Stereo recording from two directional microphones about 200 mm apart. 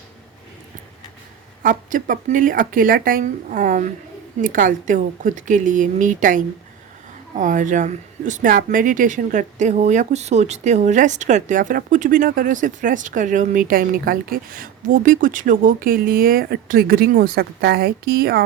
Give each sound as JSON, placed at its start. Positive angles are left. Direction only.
{"t": 1.6, "sound": "a woman's voice", "side_deg": -45}